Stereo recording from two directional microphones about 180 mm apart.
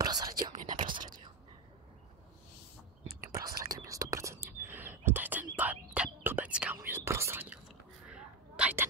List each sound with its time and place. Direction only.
0.0 s whispering: 20° right (ahead or behind)
0.7 s whispering: 45° right (ahead or behind)
0.9 s whispering: 25° right (ahead or behind)
3.3 s whispering: 20° right (ahead or behind)
8.1 s sneeze: 5° right (ahead or behind)